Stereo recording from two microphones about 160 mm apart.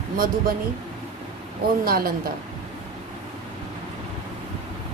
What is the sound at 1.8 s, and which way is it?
Speech, 70° right (ahead or behind).